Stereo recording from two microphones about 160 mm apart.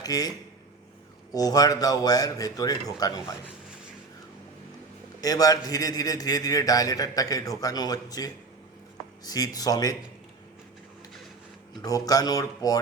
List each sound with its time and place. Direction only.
0.0 s a man's voice: 25° left (ahead or behind)
5.2 s a man's voice: 25° left (ahead or behind)
11.8 s a man's voice: 25° left (ahead or behind)